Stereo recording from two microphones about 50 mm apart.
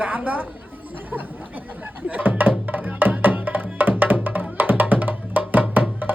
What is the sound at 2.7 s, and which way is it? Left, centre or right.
Music, right.